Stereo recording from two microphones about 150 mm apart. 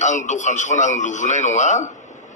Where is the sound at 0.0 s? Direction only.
50° left (ahead or behind).